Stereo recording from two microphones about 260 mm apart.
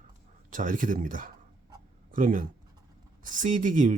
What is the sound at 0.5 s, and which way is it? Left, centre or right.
Speech, right.